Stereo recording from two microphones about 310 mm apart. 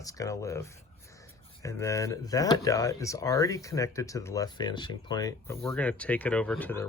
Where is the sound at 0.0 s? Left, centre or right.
Centre.